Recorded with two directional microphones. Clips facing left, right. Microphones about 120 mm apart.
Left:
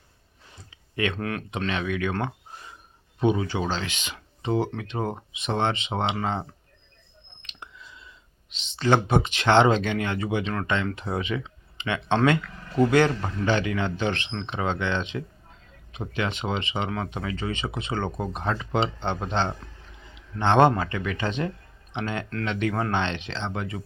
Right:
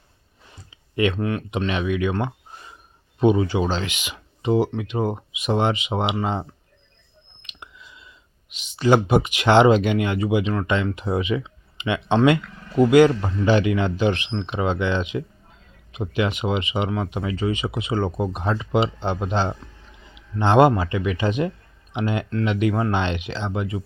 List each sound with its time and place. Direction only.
0.7 s a sound: 20° right (ahead or behind)
1.2 s speech: centre (ahead or behind)
1.5 s speech: 15° right (ahead or behind)
3.2 s speech: 15° right (ahead or behind)
7.5 s whispering: 10° right (ahead or behind)
8.4 s speech: 10° right (ahead or behind)